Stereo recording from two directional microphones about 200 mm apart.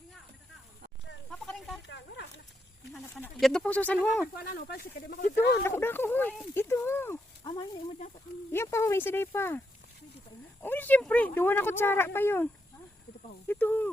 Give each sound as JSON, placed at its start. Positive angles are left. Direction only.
{"t": 1.3, "sound": "a sound", "side_deg": 0}
{"t": 1.9, "sound": "snake", "side_deg": 60}
{"t": 3.4, "sound": "speech", "side_deg": 5}
{"t": 4.4, "sound": "speech", "side_deg": 50}
{"t": 5.5, "sound": "speech", "side_deg": 15}
{"t": 7.9, "sound": "speech", "side_deg": 40}
{"t": 8.5, "sound": "speech", "side_deg": 15}
{"t": 10.6, "sound": "speech", "side_deg": 10}
{"t": 13.5, "sound": "speech", "side_deg": 10}